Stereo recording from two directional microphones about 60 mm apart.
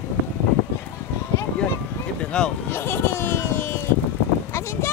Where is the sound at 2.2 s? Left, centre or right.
Centre.